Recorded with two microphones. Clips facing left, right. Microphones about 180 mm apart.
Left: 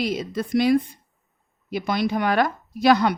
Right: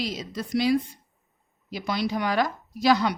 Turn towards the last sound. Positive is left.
turn(degrees=55)  # may be behind; listen again after turning